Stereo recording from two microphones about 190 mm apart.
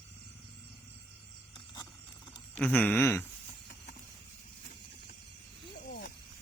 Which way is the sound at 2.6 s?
10° left (ahead or behind).